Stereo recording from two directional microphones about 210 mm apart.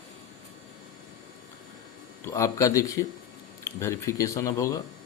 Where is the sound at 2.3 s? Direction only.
15° left (ahead or behind).